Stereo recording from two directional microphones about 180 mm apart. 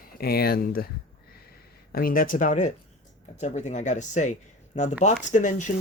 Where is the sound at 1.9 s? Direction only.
50° left (ahead or behind).